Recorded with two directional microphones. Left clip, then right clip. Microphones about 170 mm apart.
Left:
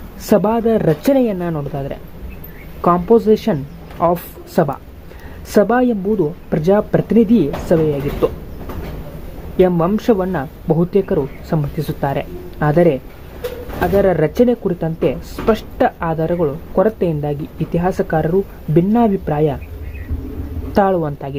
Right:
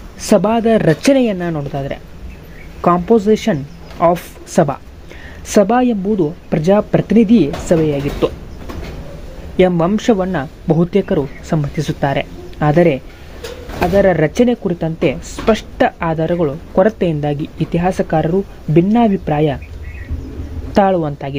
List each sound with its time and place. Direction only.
0.2 s speech: 10° right (ahead or behind)
9.6 s speech: 15° right (ahead or behind)
20.7 s speech: 15° right (ahead or behind)